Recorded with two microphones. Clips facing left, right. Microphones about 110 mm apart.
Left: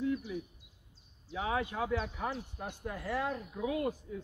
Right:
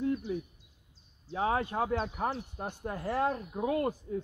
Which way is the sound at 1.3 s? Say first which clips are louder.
Right 4 dB; 40° right (ahead or behind).